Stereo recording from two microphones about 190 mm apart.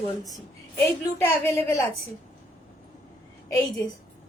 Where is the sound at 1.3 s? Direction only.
10° left (ahead or behind).